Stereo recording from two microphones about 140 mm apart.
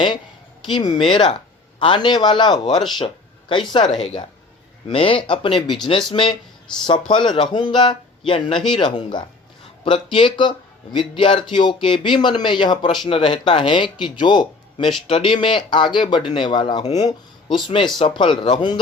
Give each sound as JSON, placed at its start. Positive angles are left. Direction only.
{"t": 0.7, "sound": "speech", "side_deg": 30}
{"t": 4.9, "sound": "speech", "side_deg": 40}
{"t": 6.7, "sound": "speech", "side_deg": 5}
{"t": 7.1, "sound": "speech", "side_deg": 35}